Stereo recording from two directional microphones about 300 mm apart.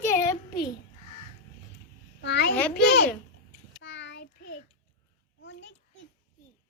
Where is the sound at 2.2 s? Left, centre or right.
Left.